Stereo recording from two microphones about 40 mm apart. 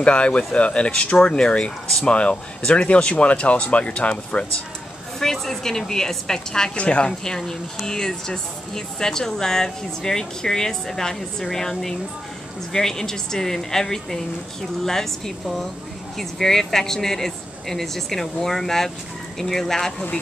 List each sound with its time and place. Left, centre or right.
0.0 s speech: left
5.2 s speech: centre
6.8 s speech: left
7.2 s speech: centre